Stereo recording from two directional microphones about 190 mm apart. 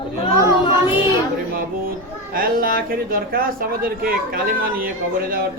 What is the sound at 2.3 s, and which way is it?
A man's voice, 50° right (ahead or behind).